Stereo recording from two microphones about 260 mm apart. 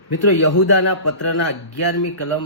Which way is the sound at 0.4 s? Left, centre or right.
Left.